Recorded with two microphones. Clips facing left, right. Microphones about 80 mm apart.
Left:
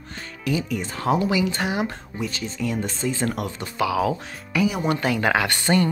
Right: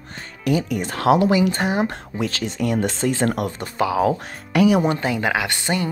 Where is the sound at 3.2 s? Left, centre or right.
Right.